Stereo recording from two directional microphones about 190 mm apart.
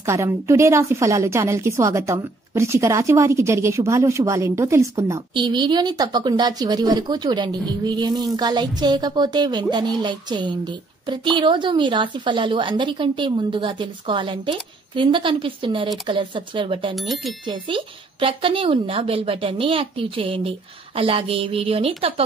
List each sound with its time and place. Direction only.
0.0 s a woman's voice: 15° right (ahead or behind)
16.9 s speech: centre (ahead or behind)
17.5 s a woman's voice: 25° right (ahead or behind)